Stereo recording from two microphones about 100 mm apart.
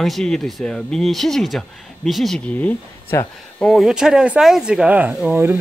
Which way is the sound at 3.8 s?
5° right (ahead or behind).